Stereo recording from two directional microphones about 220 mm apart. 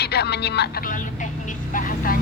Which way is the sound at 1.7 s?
40° left (ahead or behind).